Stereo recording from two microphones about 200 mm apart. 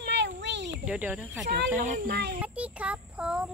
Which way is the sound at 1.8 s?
50° right (ahead or behind).